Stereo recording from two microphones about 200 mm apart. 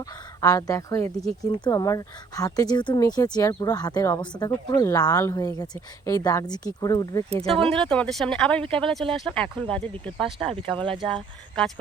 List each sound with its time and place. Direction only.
0.4 s speech: 15° left (ahead or behind)